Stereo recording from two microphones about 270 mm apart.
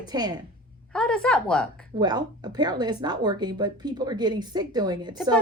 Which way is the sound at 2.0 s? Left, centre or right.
Centre.